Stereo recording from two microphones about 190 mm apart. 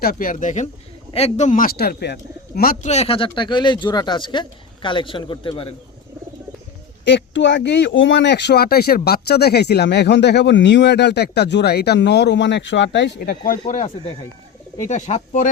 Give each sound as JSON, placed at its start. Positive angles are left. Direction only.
{"t": 0.0, "sound": "speech", "side_deg": 50}
{"t": 2.9, "sound": "speech", "side_deg": 30}
{"t": 7.0, "sound": "speech", "side_deg": 65}